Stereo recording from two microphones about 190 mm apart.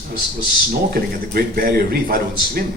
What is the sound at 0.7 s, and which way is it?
A man's voice, 55° right (ahead or behind).